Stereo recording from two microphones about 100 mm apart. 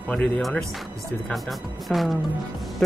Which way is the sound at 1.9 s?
Centre (ahead or behind).